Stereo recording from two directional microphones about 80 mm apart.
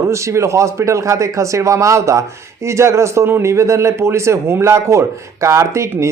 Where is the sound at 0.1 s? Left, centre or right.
Right.